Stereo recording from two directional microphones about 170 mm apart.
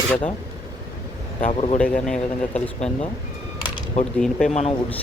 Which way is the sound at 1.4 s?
40° left (ahead or behind).